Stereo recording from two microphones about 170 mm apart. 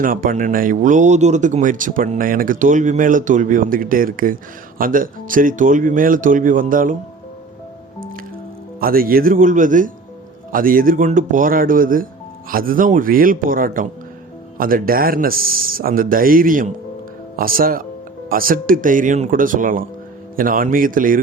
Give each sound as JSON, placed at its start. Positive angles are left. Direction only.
{"t": 0.0, "sound": "speech", "side_deg": -55}
{"t": 8.8, "sound": "speech", "side_deg": -60}